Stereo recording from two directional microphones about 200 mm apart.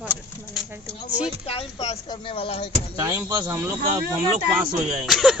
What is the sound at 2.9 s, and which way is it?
Speech, 10° right (ahead or behind).